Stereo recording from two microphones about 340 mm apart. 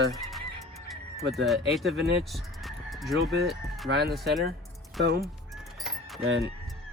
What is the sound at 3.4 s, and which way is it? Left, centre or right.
Speech, centre.